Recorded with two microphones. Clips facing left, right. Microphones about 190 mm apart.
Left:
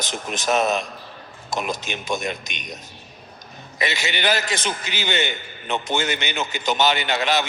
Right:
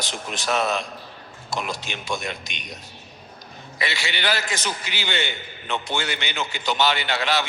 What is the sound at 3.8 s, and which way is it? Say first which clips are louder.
A man's voice: left 3 dB; 20° left (ahead or behind).